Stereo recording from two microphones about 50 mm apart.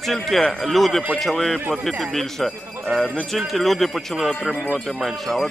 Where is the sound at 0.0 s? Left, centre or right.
Centre.